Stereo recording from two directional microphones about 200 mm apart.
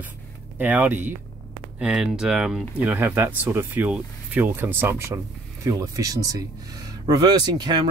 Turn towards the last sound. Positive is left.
turn(degrees=-20)  # may be behind; listen again after turning